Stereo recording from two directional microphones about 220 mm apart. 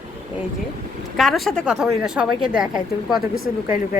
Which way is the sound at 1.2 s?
Centre (ahead or behind).